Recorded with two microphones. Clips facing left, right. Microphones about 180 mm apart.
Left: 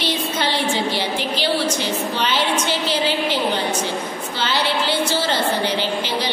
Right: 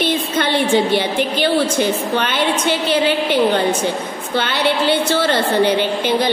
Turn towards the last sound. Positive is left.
turn(degrees=-55)  # may be behind; listen again after turning